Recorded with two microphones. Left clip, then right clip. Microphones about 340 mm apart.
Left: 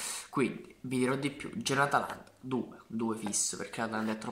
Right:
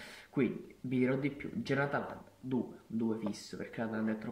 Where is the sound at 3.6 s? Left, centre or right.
Left.